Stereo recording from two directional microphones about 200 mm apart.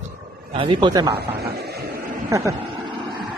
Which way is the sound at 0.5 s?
25° right (ahead or behind).